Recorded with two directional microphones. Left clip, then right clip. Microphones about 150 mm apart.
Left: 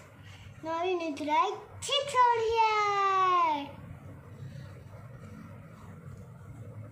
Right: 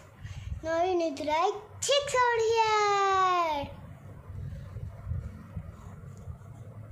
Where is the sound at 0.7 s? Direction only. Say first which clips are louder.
Right 4 dB; 60° right (ahead or behind).